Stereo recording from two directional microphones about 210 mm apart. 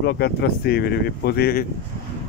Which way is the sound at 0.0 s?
50° left (ahead or behind).